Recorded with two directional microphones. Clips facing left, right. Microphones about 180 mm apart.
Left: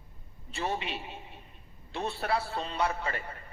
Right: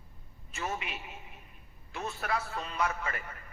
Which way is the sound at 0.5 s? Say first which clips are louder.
Left 4 dB; 30° left (ahead or behind).